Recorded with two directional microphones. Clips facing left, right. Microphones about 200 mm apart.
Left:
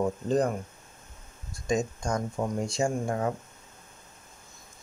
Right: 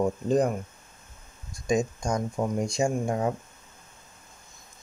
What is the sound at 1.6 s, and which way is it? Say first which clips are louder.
Speech: right 2 dB; 15° right (ahead or behind).